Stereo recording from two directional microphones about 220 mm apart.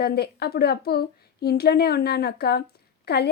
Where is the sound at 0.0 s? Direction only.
45° left (ahead or behind).